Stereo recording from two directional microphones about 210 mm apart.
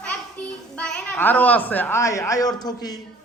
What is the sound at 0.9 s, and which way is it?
A man's voice, 10° left (ahead or behind).